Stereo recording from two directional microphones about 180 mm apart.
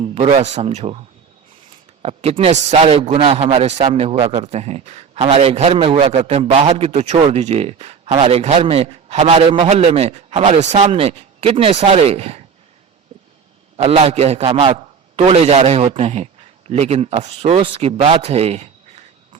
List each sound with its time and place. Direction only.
0.0 s a man's voice: 35° right (ahead or behind)
2.0 s a man's voice: 35° right (ahead or behind)
13.8 s a man's voice: 35° right (ahead or behind)